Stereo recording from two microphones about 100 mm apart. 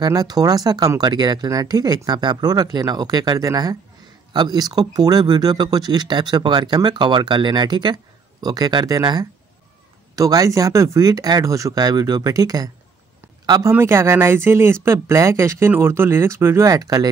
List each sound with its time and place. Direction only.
0.0 s speech: 40° right (ahead or behind)
13.6 s speech: 25° right (ahead or behind)